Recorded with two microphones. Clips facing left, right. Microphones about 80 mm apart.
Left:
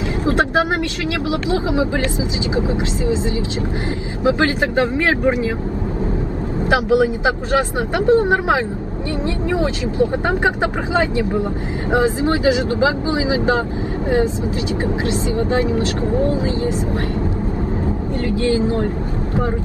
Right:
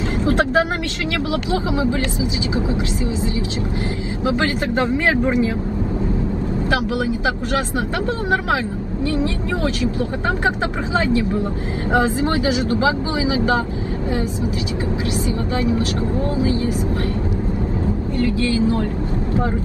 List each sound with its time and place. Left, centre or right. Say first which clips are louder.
4.2 s speech: left 4 dB; left
6.7 s speech: left 7 dB; left
15.5 s speech: even; left
18.2 s speech: left 1 dB; left